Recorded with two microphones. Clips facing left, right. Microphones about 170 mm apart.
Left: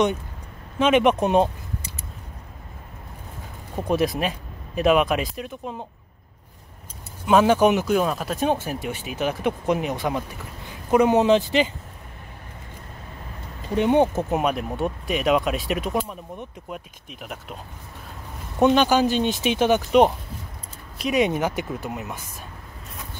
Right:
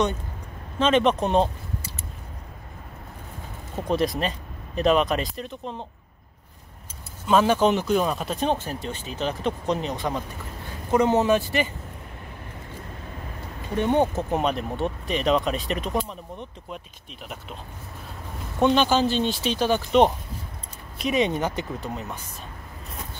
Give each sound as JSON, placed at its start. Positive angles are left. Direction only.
{"t": 0.7, "sound": "speech", "side_deg": 10}
{"t": 3.7, "sound": "speech", "side_deg": 10}
{"t": 7.2, "sound": "speech", "side_deg": 15}
{"t": 13.7, "sound": "speech", "side_deg": 15}
{"t": 18.6, "sound": "speech", "side_deg": 10}
{"t": 21.0, "sound": "speech", "side_deg": 5}